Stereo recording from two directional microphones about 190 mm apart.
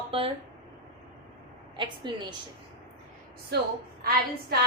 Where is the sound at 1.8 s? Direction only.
25° right (ahead or behind).